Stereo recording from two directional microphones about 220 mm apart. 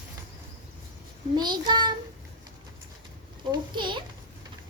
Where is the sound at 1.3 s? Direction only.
20° right (ahead or behind).